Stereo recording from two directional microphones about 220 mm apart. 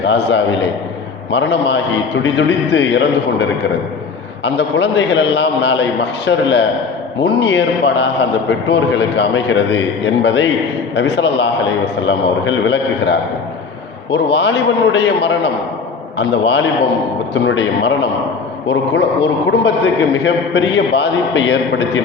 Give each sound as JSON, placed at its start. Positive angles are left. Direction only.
{"t": 0.0, "sound": "a man's voice", "side_deg": 55}
{"t": 4.4, "sound": "a man's voice", "side_deg": 55}